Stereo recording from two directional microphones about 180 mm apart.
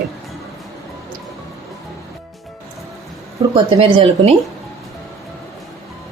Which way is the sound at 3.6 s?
30° right (ahead or behind).